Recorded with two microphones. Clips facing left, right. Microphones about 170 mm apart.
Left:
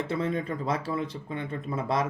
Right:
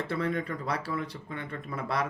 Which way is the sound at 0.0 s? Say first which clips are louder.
Left 2 dB; 20° left (ahead or behind).